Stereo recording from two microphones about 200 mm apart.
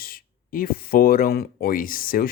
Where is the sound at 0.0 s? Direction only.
45° left (ahead or behind).